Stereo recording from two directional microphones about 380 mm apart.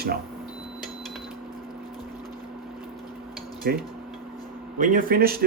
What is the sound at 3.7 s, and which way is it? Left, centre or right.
Speech, right.